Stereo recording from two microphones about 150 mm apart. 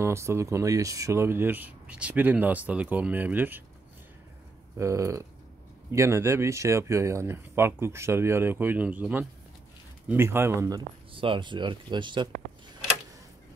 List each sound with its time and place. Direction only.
0.0 s speech: 20° right (ahead or behind)
4.7 s speech: 20° right (ahead or behind)
11.1 s speech: 35° right (ahead or behind)